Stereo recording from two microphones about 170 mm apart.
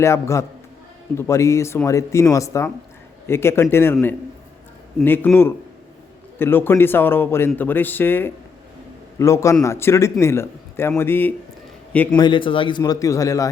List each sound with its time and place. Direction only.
0.0 s speech: 15° left (ahead or behind)
5.0 s speech: 10° left (ahead or behind)
12.1 s a man's voice: 25° left (ahead or behind)